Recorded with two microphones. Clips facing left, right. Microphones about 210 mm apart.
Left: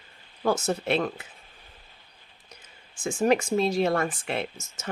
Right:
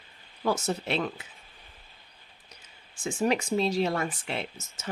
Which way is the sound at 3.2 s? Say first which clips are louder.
Left 3 dB; 50° left (ahead or behind).